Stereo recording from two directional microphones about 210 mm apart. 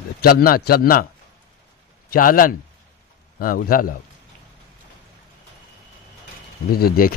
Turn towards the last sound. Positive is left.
turn(degrees=45)  # may be behind; listen again after turning